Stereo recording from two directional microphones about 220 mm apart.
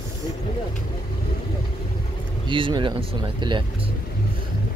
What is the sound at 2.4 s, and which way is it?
Speech, 20° right (ahead or behind).